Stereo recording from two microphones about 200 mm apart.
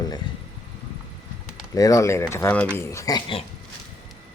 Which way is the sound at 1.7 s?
15° left (ahead or behind).